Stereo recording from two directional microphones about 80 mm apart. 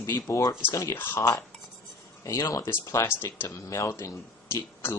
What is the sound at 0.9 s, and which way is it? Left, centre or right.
Speech, left.